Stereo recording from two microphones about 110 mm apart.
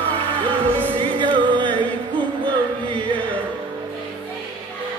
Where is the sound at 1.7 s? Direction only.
15° left (ahead or behind).